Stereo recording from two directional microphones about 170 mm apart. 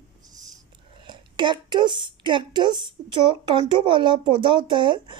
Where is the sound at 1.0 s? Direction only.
25° right (ahead or behind).